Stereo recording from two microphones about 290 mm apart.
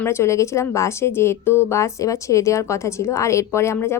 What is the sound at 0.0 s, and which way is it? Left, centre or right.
A woman's voice, centre.